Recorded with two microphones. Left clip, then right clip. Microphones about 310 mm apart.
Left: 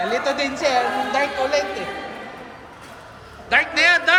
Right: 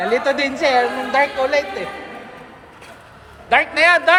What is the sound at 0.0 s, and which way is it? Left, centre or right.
A woman's voice, right.